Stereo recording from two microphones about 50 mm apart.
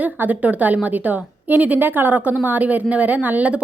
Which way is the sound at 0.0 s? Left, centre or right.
Right.